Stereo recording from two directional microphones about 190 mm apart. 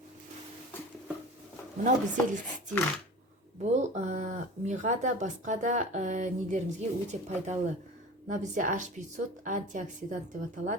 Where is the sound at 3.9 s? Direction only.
40° right (ahead or behind).